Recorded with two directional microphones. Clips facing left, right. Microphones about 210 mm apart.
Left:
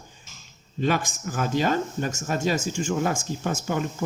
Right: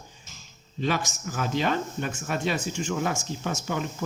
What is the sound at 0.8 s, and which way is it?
Speech, 50° left (ahead or behind).